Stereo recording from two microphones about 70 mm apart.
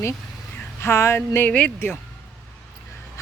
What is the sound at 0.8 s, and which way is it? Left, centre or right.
Speech, left.